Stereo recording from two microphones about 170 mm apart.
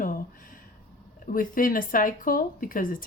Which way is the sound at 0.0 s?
55° left (ahead or behind).